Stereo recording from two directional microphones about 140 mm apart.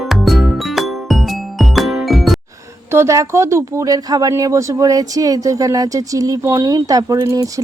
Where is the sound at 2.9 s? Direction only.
20° right (ahead or behind).